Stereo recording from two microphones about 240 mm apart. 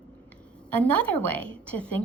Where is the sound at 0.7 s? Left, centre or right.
Centre.